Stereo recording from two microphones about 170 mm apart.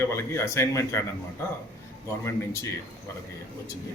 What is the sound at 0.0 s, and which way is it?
A man's voice, 15° left (ahead or behind).